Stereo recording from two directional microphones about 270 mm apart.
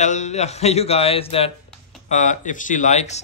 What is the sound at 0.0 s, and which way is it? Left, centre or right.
Speech, left.